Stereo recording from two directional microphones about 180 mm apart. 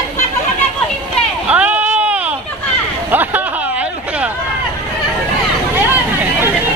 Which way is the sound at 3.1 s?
10° right (ahead or behind).